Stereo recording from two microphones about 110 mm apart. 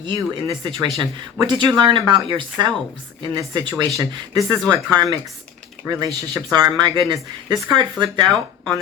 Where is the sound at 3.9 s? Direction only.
30° right (ahead or behind).